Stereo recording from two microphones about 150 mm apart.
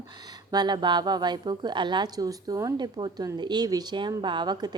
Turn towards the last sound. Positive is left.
turn(degrees=-25)  # may be behind; listen again after turning